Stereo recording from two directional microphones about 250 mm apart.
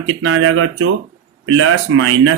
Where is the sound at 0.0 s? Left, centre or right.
Right.